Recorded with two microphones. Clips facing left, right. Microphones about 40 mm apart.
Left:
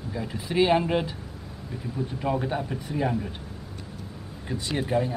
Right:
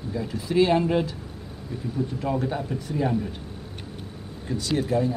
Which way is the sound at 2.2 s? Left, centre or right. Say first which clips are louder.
Left 2 dB; centre.